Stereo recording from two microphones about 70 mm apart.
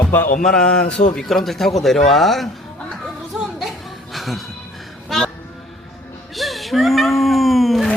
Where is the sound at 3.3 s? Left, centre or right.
Centre.